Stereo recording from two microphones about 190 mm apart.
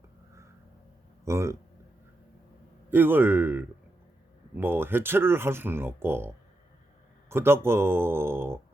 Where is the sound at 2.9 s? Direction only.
10° right (ahead or behind).